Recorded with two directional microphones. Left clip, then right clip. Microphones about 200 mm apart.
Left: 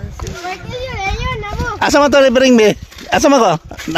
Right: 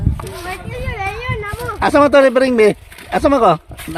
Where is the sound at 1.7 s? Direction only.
40° left (ahead or behind).